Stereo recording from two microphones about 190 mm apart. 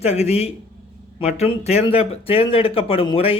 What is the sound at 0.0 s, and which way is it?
A man's voice, 35° left (ahead or behind).